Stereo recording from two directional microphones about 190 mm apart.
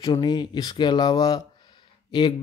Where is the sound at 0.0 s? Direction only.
25° left (ahead or behind).